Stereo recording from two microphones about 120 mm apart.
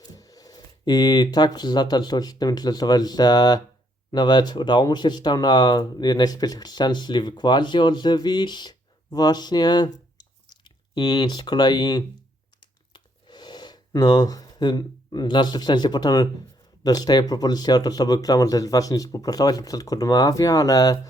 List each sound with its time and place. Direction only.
0.0 s speech: 30° left (ahead or behind)
10.2 s chewing: 40° left (ahead or behind)
12.9 s a sound: 40° left (ahead or behind)
16.8 s speech: 35° left (ahead or behind)